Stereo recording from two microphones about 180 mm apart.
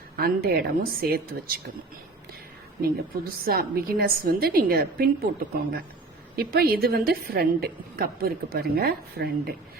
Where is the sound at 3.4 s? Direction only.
55° right (ahead or behind).